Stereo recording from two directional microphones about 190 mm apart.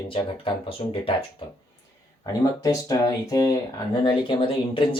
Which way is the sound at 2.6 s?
20° left (ahead or behind).